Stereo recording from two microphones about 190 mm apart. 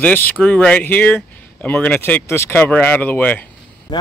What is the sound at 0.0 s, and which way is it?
Speech, 10° left (ahead or behind).